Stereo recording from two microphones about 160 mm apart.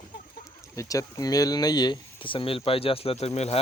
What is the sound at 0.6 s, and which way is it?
Speech, 20° left (ahead or behind).